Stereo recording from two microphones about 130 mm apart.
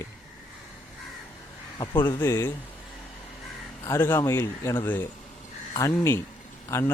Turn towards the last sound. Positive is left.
turn(degrees=20)  # may be behind; listen again after turning